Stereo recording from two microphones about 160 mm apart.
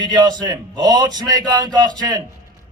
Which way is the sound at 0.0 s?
25° right (ahead or behind).